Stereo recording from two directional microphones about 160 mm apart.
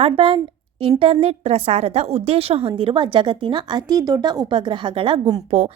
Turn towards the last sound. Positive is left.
turn(degrees=-45)  # may be behind; listen again after turning